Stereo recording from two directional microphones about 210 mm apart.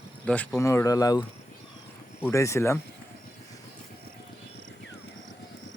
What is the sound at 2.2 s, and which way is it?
Speech, 15° left (ahead or behind).